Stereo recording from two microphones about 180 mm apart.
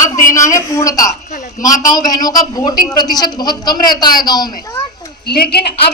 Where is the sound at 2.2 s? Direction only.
20° left (ahead or behind).